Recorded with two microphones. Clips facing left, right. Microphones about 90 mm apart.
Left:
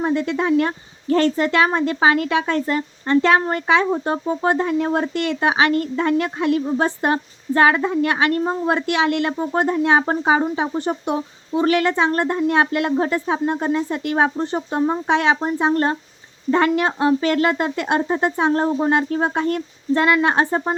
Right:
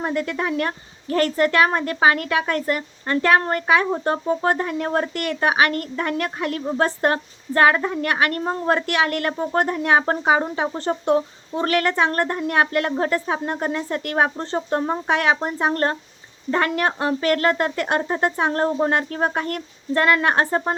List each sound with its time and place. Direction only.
0.0 s a woman's voice: 20° left (ahead or behind)
8.4 s a woman's voice: 10° left (ahead or behind)